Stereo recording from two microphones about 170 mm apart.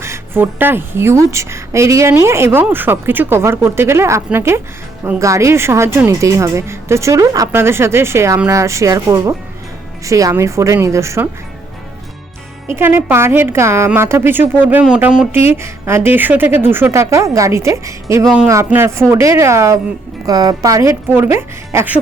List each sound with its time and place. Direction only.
0.0 s speech: 15° right (ahead or behind)
12.7 s speech: 10° right (ahead or behind)